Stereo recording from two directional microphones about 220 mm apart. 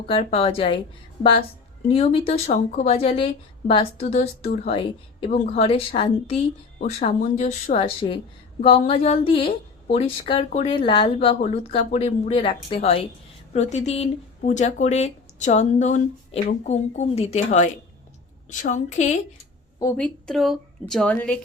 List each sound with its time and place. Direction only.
0.0 s speech: 25° left (ahead or behind)
1.9 s speech: 25° left (ahead or behind)
19.8 s speech: 10° left (ahead or behind)